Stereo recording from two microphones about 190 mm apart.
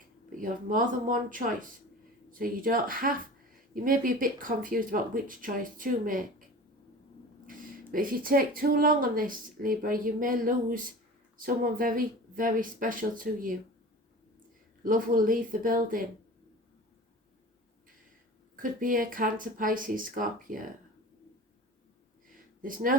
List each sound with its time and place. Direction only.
0.3 s speech: 45° right (ahead or behind)
7.9 s speech: 50° right (ahead or behind)
14.8 s speech: 45° right (ahead or behind)
18.5 s speech: 45° right (ahead or behind)
22.6 s speech: 45° right (ahead or behind)